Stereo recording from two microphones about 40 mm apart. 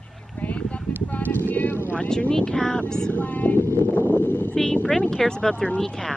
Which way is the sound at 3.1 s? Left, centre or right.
Left.